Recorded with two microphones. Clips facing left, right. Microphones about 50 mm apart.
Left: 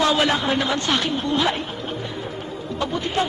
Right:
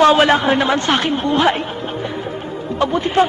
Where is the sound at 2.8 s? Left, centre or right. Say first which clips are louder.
Right 8 dB; right.